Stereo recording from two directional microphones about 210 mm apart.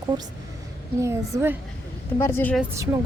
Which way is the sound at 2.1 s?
10° left (ahead or behind).